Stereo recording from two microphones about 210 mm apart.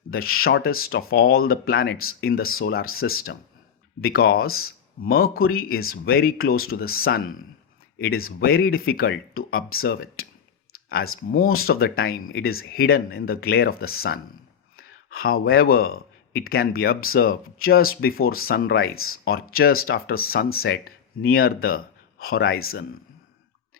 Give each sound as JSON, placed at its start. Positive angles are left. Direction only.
{"t": 0.1, "sound": "speech", "side_deg": 45}
{"t": 11.3, "sound": "speech", "side_deg": 45}
{"t": 18.9, "sound": "speech", "side_deg": 85}
{"t": 19.5, "sound": "speech", "side_deg": 45}